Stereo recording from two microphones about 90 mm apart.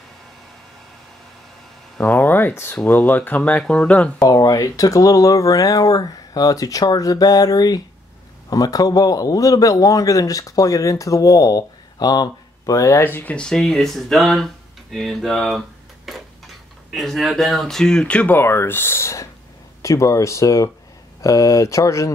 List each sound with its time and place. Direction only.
2.0 s a sound: 20° left (ahead or behind)
2.8 s speech: 20° left (ahead or behind)
4.2 s a man's voice: 45° left (ahead or behind)
13.0 s speech: 20° left (ahead or behind); by 15.6 s centre (ahead or behind)
16.1 s tick-tock: centre (ahead or behind)
16.9 s a man's voice: centre (ahead or behind); by 22.1 s 35° left (ahead or behind)